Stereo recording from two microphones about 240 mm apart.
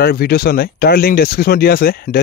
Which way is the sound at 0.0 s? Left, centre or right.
Left.